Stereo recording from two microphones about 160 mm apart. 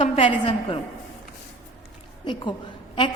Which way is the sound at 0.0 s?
30° left (ahead or behind).